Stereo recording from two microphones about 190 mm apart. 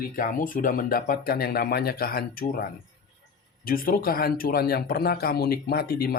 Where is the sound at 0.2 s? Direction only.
45° left (ahead or behind).